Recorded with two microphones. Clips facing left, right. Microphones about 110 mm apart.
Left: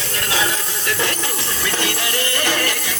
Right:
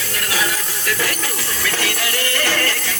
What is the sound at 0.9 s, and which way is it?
Music, 25° left (ahead or behind).